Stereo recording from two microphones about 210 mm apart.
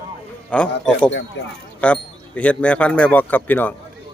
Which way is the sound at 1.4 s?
60° left (ahead or behind).